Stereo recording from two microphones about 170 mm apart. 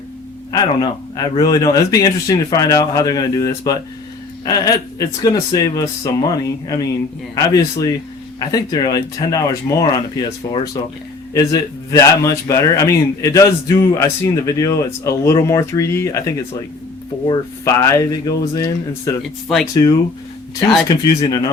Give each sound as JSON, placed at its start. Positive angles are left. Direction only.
{"t": 0.5, "sound": "speech", "side_deg": 25}
{"t": 11.3, "sound": "a man's voice", "side_deg": 20}
{"t": 20.6, "sound": "speech", "side_deg": 25}